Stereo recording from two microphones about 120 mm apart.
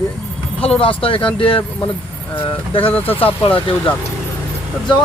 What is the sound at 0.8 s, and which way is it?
Speech, 50° left (ahead or behind).